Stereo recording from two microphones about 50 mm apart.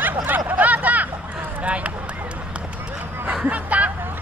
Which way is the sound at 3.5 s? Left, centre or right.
Right.